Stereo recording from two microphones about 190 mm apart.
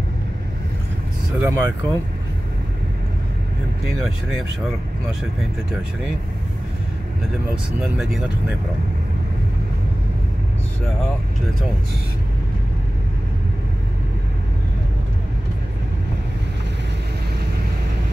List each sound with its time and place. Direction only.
1.4 s speech: 15° right (ahead or behind)